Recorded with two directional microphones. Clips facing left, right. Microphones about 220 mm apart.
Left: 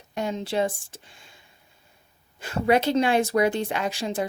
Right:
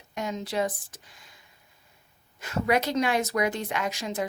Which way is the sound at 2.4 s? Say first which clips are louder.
Left 4 dB; 30° left (ahead or behind).